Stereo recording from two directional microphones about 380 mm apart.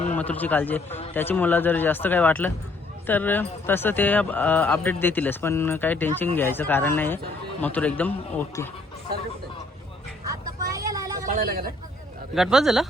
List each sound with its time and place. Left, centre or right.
0.2 s speech: centre
10.7 s vehicle: centre
11.3 s a sound: right
12.3 s speech: centre